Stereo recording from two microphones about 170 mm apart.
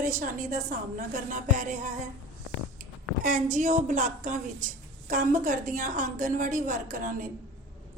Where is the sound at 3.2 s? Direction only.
50° right (ahead or behind).